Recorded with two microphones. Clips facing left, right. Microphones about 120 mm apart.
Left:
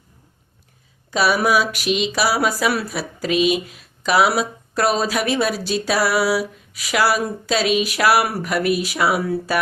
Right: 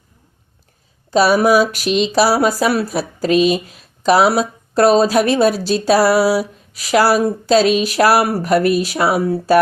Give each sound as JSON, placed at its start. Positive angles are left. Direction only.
{"t": 1.1, "sound": "a woman's voice", "side_deg": -35}